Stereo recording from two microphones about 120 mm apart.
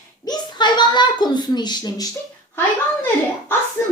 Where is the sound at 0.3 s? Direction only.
35° left (ahead or behind).